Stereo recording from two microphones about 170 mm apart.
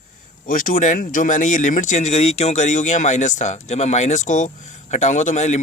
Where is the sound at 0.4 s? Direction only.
55° left (ahead or behind).